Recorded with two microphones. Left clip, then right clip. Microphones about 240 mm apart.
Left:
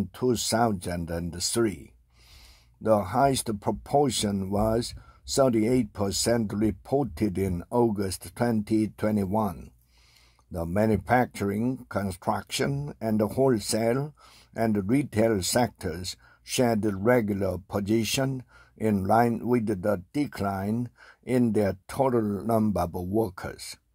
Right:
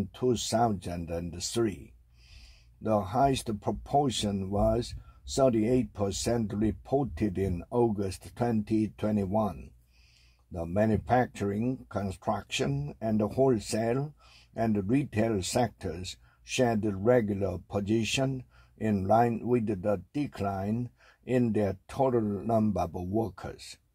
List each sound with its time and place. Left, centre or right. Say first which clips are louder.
0.1 s speech: left 2 dB; left
2.8 s speech: left 4 dB; left